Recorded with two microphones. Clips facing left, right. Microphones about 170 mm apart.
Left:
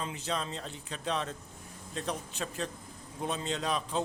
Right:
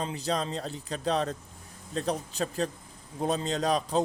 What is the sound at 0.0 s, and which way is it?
A man's voice, 35° right (ahead or behind).